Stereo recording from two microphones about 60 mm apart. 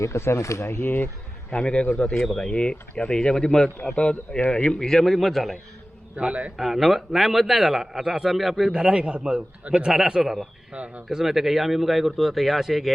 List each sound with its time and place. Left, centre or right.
0.0 s speech: left
1.5 s a man's voice: centre
2.6 s a man's voice: centre
6.1 s speech: centre
6.6 s a man's voice: centre
8.7 s a man's voice: centre
10.7 s speech: right
11.1 s a man's voice: centre